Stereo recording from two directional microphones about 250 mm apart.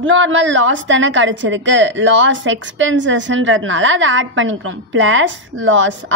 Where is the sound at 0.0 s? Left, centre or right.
Right.